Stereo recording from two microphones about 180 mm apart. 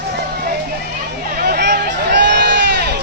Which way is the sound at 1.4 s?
60° right (ahead or behind).